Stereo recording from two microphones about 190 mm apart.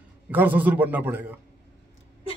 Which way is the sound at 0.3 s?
10° right (ahead or behind).